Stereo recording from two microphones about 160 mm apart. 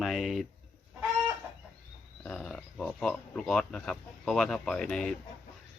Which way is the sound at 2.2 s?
Centre (ahead or behind).